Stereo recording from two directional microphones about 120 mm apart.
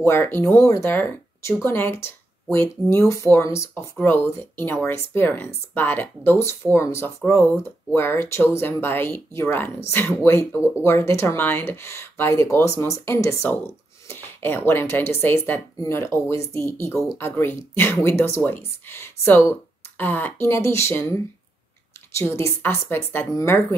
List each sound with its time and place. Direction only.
0.0 s speech: 20° left (ahead or behind)
14.0 s a sound: 20° left (ahead or behind)
14.7 s speech: 20° left (ahead or behind)
22.1 s speech: 25° left (ahead or behind)